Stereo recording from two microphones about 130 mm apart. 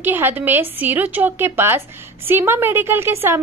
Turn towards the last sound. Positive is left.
turn(degrees=-20)  # may be behind; listen again after turning